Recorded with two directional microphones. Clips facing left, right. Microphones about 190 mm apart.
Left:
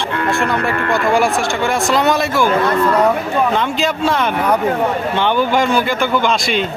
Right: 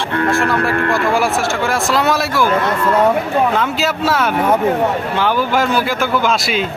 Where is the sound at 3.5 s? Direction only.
5° right (ahead or behind).